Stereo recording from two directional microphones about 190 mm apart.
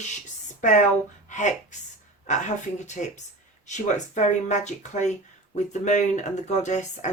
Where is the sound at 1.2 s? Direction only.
40° left (ahead or behind).